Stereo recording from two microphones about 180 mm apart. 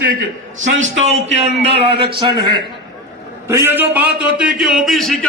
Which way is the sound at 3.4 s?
15° right (ahead or behind).